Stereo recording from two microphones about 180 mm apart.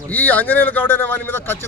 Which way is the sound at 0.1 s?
10° left (ahead or behind).